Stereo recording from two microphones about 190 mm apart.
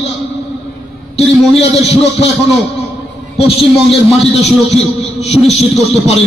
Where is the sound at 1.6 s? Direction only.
30° left (ahead or behind).